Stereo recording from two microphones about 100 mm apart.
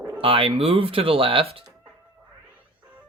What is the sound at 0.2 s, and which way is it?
Speech, 65° right (ahead or behind).